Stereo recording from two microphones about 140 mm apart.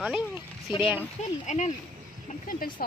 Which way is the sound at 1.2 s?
55° left (ahead or behind).